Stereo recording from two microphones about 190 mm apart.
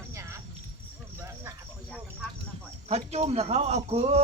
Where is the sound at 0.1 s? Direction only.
15° right (ahead or behind).